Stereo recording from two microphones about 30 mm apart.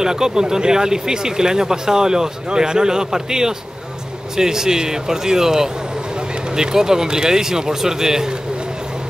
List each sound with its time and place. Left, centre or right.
0.0 s speech: centre